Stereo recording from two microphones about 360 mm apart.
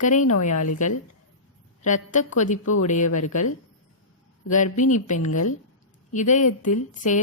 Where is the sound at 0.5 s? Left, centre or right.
Left.